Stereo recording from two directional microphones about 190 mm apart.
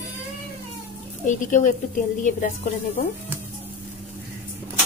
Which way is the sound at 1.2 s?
40° left (ahead or behind).